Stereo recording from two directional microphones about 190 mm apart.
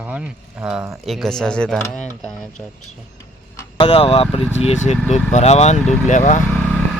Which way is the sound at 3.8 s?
30° left (ahead or behind).